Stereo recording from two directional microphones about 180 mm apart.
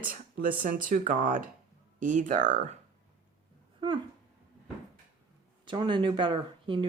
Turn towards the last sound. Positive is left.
turn(degrees=-25)  # may be behind; listen again after turning